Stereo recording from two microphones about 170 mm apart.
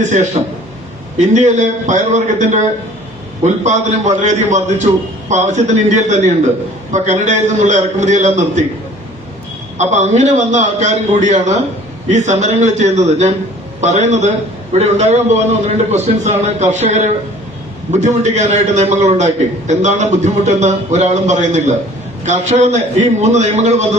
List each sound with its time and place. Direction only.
0.0 s a man's voice: 45° right (ahead or behind)
9.7 s a man's voice: 45° right (ahead or behind)